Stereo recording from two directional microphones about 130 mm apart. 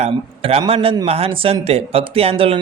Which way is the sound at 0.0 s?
50° right (ahead or behind).